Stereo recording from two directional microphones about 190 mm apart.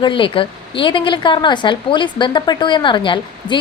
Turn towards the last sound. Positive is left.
turn(degrees=25)  # may be behind; listen again after turning